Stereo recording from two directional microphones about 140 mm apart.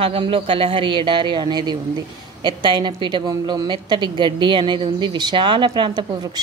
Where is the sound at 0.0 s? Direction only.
40° right (ahead or behind).